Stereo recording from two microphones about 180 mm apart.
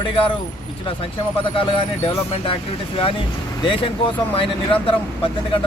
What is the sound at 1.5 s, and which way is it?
Speech, 30° left (ahead or behind).